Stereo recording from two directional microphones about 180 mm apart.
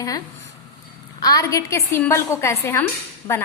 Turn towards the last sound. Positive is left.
turn(degrees=15)  # may be behind; listen again after turning